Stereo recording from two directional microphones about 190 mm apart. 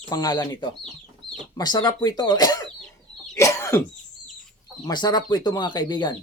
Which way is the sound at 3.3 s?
15° left (ahead or behind).